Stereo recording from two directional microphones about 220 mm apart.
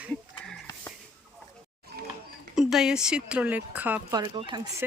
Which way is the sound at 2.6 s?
Centre (ahead or behind).